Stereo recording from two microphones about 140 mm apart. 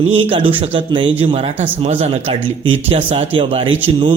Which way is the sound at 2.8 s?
40° right (ahead or behind).